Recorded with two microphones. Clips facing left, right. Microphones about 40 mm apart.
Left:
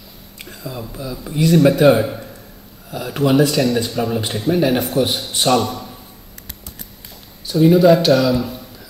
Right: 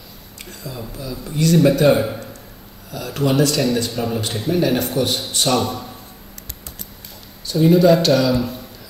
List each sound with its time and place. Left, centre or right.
0.5 s speech: centre
7.4 s speech: centre